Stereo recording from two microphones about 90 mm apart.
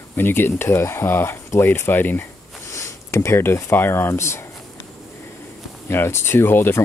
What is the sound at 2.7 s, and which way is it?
Speech, 30° left (ahead or behind).